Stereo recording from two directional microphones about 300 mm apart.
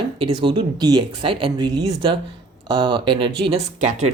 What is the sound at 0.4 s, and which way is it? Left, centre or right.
Speech, centre.